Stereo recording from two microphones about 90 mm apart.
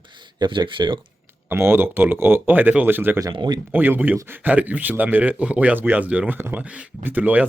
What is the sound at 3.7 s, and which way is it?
Speech, 20° right (ahead or behind).